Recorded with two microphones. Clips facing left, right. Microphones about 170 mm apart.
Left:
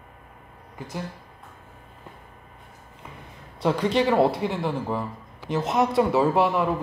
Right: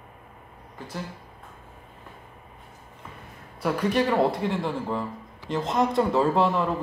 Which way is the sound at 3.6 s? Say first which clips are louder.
Left 2 dB; 20° left (ahead or behind).